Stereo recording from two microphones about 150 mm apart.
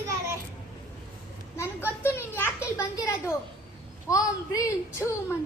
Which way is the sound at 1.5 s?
15° left (ahead or behind).